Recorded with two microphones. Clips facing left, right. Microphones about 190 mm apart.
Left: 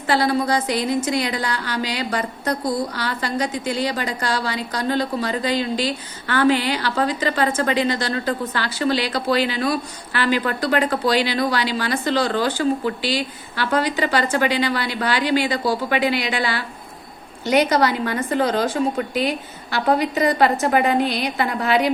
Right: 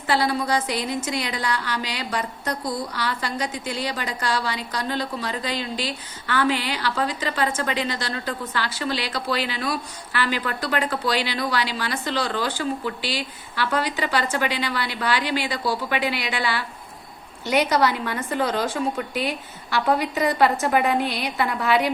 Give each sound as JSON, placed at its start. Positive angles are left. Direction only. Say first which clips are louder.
{"t": 0.1, "sound": "a woman's voice", "louder": "left 3 dB", "side_deg": 0}